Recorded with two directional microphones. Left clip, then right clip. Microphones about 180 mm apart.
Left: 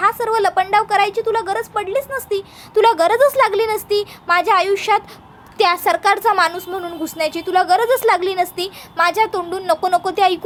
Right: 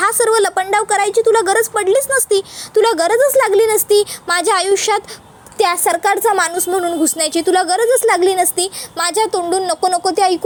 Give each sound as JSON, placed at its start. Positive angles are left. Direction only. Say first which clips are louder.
{"t": 0.0, "sound": "a woman's voice", "louder": "right 3 dB", "side_deg": -30}
{"t": 2.7, "sound": "a woman's voice", "louder": "even", "side_deg": -15}
{"t": 7.9, "sound": "speech", "louder": "right 3 dB", "side_deg": -15}